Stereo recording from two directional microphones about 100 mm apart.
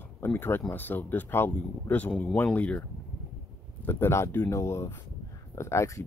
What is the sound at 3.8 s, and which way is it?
Speech, 25° left (ahead or behind).